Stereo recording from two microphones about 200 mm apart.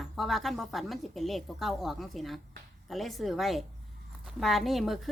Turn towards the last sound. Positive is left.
turn(degrees=0)  # may be behind; listen again after turning